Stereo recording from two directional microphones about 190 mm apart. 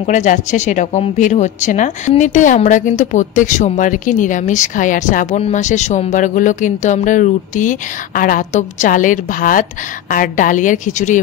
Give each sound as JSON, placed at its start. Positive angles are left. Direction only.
{"t": 0.0, "sound": "a woman's voice", "side_deg": 40}